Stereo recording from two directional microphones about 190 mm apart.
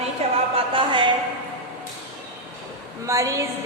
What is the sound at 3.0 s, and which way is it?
Speech, 15° right (ahead or behind).